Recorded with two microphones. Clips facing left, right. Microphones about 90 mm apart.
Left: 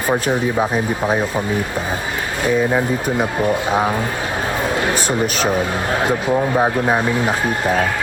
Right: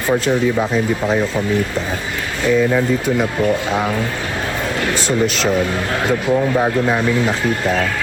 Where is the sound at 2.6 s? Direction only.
25° left (ahead or behind).